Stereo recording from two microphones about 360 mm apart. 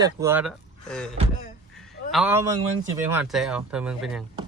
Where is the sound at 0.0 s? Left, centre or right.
Centre.